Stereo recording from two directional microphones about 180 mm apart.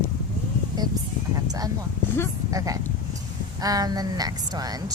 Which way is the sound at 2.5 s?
20° right (ahead or behind).